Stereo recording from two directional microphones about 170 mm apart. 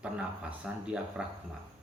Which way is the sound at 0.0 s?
5° right (ahead or behind).